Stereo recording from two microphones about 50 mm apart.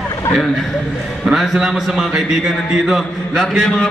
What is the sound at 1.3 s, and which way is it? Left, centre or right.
A man's voice, centre.